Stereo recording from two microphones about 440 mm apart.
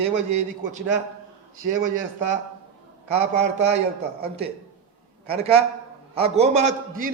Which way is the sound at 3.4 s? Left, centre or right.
Centre.